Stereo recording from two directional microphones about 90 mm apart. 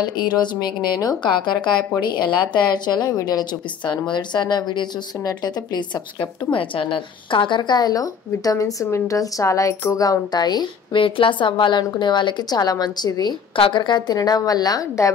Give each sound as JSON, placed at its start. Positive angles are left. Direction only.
{"t": 0.4, "sound": "a woman's voice", "side_deg": 50}
{"t": 3.8, "sound": "speech", "side_deg": 55}
{"t": 6.5, "sound": "a woman's voice", "side_deg": 70}
{"t": 13.6, "sound": "a woman's voice", "side_deg": 65}